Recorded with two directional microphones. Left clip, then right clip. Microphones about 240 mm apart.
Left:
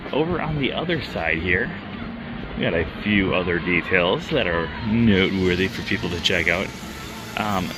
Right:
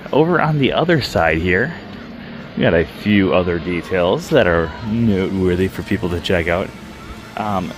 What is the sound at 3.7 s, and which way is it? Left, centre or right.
Speech, right.